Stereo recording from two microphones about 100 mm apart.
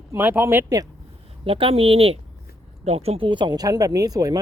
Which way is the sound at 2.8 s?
90° right.